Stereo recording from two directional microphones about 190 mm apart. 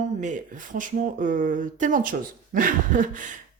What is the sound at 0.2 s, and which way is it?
Speech, 40° right (ahead or behind).